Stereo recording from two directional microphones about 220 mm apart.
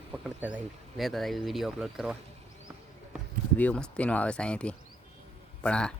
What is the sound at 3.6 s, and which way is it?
Speech, 5° left (ahead or behind).